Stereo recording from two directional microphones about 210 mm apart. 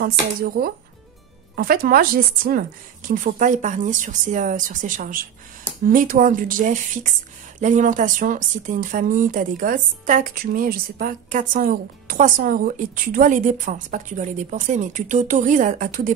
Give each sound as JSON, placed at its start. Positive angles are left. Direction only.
{"t": 0.0, "sound": "speech", "side_deg": -45}